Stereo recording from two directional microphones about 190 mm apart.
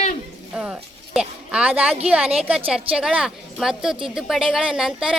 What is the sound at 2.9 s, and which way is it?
A woman's voice, 5° right (ahead or behind).